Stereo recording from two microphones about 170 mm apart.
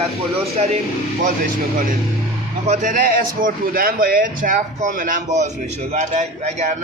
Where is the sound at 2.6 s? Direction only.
50° right (ahead or behind).